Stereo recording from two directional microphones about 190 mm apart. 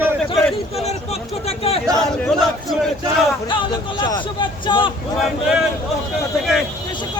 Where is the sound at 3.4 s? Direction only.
25° left (ahead or behind).